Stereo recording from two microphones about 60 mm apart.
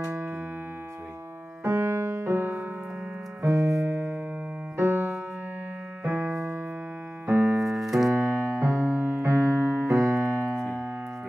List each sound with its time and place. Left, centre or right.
0.0 s music: right
1.6 s music: right
3.4 s keyboard: right
3.9 s music: right
7.4 s music: centre
8.1 s keyboard: right